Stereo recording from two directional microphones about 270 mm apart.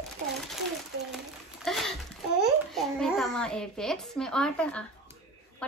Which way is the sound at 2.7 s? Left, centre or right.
Centre.